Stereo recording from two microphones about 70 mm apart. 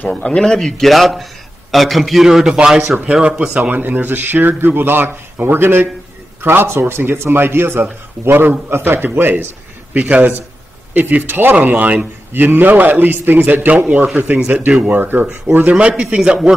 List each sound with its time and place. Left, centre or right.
0.1 s a man's voice: centre; by 15.7 s right
16.2 s a man's voice: centre